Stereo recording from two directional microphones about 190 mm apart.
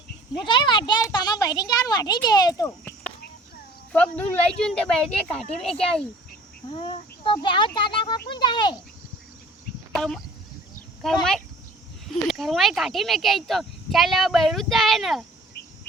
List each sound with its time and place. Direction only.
0.3 s a child's voice: 25° left (ahead or behind); by 4.9 s 5° left (ahead or behind)
6.7 s a child's voice: 30° left (ahead or behind)
9.9 s speech: centre (ahead or behind)